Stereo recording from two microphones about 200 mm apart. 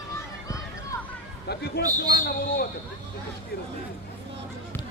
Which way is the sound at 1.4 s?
50° left (ahead or behind).